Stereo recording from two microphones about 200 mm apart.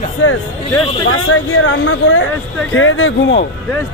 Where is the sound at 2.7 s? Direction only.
75° left (ahead or behind).